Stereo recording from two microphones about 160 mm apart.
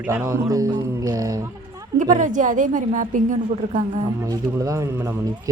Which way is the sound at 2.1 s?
50° right (ahead or behind).